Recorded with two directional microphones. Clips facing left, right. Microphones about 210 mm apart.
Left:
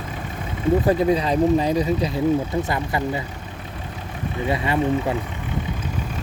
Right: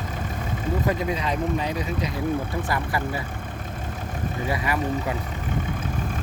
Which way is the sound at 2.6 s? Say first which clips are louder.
Left 3 dB; 20° left (ahead or behind).